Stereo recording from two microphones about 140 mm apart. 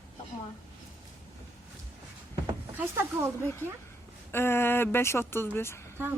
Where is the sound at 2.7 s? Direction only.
15° right (ahead or behind).